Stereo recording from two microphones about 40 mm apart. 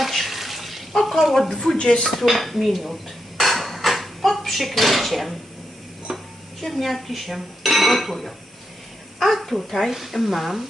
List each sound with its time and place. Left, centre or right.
0.0 s water tap: centre
1.8 s dishes: left
2.1 s dishes: centre
6.1 s a sound: centre
6.6 s speech: centre